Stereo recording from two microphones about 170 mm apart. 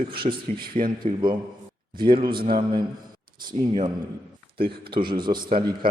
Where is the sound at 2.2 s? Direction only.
60° right (ahead or behind).